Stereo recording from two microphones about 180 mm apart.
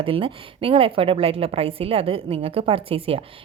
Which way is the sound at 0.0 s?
30° right (ahead or behind).